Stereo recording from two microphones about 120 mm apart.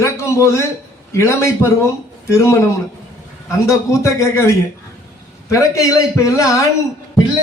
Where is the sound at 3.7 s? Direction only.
25° left (ahead or behind).